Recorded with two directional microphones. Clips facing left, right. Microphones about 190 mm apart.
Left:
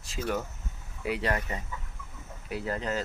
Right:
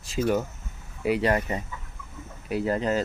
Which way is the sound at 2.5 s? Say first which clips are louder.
Right 7 dB; 15° right (ahead or behind).